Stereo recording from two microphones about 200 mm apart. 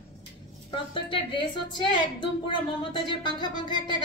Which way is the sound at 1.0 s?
25° left (ahead or behind).